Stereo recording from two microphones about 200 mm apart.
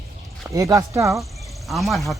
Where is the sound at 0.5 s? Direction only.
15° right (ahead or behind).